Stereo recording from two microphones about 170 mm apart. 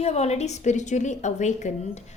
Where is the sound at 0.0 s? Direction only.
40° left (ahead or behind).